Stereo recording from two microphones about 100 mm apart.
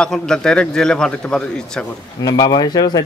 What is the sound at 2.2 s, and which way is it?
Speech, 45° left (ahead or behind).